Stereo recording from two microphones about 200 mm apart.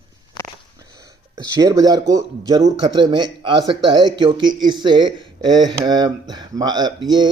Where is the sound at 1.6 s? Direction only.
20° right (ahead or behind).